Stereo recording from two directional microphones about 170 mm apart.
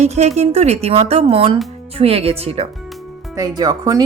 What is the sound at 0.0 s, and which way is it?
Speech, 40° right (ahead or behind).